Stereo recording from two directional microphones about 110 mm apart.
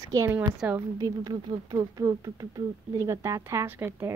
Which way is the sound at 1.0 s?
40° right (ahead or behind).